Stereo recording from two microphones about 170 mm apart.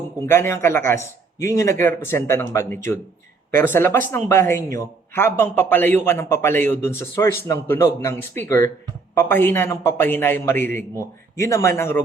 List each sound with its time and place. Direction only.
0.2 s speech: 15° left (ahead or behind)